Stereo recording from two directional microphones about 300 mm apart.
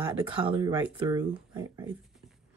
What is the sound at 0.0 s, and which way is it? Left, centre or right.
Speech, centre.